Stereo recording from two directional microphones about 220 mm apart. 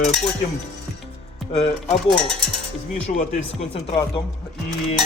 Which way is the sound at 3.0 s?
30° left (ahead or behind).